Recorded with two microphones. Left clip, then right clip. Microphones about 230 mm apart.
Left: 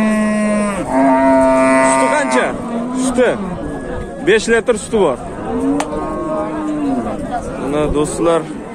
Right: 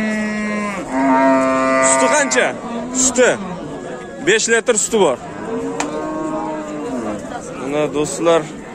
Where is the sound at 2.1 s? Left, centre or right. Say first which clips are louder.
Left 1 dB; centre.